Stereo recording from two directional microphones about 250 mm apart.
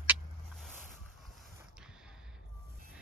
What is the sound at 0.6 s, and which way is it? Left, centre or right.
Boat, centre.